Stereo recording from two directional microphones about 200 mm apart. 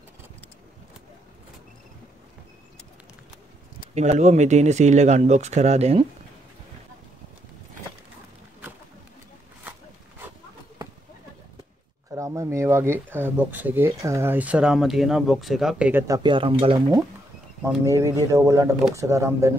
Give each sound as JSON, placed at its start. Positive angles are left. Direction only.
{"t": 3.9, "sound": "speech", "side_deg": -35}
{"t": 12.1, "sound": "speech", "side_deg": -15}
{"t": 16.2, "sound": "speech", "side_deg": -25}
{"t": 17.8, "sound": "speech", "side_deg": -15}